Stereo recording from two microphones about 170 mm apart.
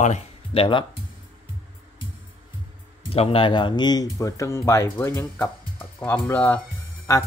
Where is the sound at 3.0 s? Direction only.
35° left (ahead or behind); by 6.6 s 10° left (ahead or behind).